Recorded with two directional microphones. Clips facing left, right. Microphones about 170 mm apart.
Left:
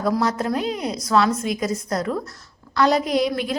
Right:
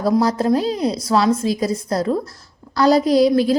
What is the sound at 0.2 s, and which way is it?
A woman's voice, 35° right (ahead or behind).